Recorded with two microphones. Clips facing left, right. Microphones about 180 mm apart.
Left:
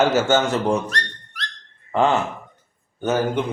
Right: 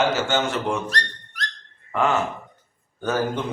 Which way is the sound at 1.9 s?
30° left (ahead or behind).